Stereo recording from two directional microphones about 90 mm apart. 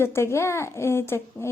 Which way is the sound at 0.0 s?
30° left (ahead or behind).